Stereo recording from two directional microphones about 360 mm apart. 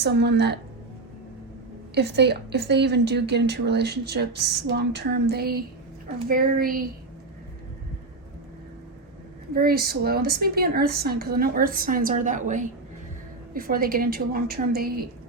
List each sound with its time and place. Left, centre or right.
0.0 s a woman's voice: right
2.0 s a woman's voice: right
9.6 s a woman's voice: right